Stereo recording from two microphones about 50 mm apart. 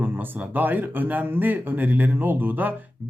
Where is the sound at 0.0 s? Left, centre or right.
Right.